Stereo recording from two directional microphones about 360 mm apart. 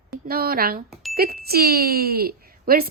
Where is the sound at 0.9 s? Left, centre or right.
Centre.